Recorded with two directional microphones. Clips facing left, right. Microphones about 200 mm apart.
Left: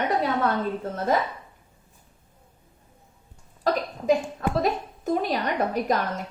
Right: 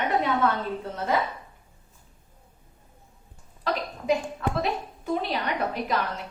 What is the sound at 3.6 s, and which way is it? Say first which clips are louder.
Cough: left 4 dB; 45° left (ahead or behind).